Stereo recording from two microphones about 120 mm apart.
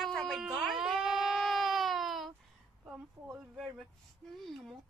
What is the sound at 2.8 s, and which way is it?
Speech, 15° right (ahead or behind).